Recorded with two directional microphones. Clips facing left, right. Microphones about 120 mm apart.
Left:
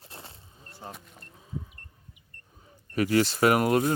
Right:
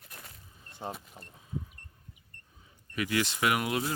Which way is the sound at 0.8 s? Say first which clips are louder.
Right 4 dB; 25° right (ahead or behind).